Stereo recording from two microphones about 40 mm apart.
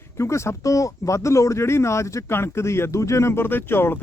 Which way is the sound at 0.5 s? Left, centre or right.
Left.